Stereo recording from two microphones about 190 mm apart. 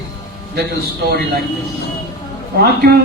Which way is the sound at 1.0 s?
55° right (ahead or behind).